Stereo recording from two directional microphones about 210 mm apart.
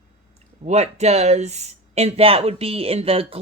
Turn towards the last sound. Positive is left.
turn(degrees=-25)  # may be behind; listen again after turning